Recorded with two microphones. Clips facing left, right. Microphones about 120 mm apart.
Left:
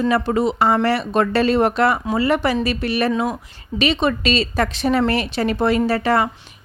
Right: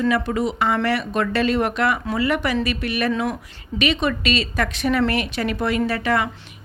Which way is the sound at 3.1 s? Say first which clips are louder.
Left 2 dB; 20° left (ahead or behind).